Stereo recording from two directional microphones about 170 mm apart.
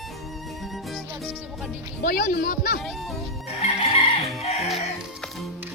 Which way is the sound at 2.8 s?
Centre (ahead or behind).